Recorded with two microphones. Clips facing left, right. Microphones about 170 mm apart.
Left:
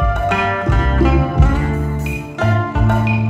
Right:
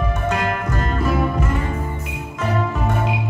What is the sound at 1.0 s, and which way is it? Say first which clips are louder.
Music: left 6 dB; 80° left.